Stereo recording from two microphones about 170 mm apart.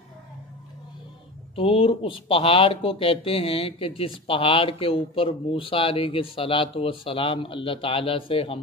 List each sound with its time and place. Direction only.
1.5 s speech: 35° left (ahead or behind)